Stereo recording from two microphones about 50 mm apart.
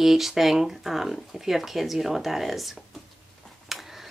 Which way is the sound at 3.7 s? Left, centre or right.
Centre.